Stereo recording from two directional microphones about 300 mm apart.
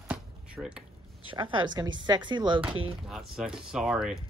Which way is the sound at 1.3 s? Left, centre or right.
Centre.